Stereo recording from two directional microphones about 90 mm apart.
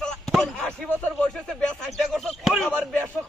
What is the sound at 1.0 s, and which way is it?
Speech, 5° left (ahead or behind).